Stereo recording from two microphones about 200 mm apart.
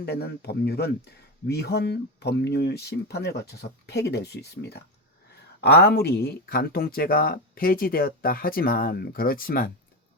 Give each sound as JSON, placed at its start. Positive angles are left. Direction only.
{"t": 0.0, "sound": "a man's voice", "side_deg": 55}